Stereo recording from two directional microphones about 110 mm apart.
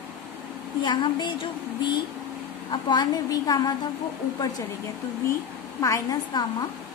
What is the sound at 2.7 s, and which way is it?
A woman's voice, 40° left (ahead or behind).